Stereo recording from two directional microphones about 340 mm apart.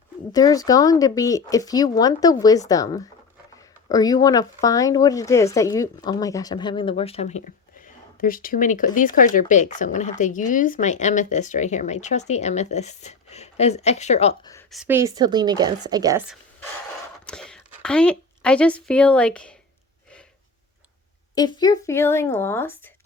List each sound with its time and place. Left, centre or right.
0.3 s speech: centre
14.7 s a woman's voice: centre
17.2 s a woman's voice: centre
21.3 s speech: centre